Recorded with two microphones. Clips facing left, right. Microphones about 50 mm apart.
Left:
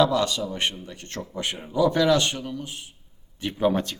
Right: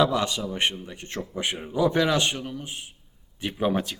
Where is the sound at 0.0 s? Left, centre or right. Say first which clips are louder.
Left 2 dB; centre.